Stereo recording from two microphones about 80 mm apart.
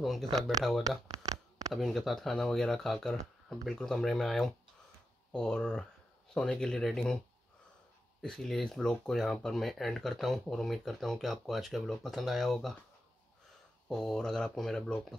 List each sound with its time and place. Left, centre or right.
0.0 s speech: centre
0.8 s a sound: right
1.7 s speech: centre
8.2 s speech: centre
13.8 s speech: centre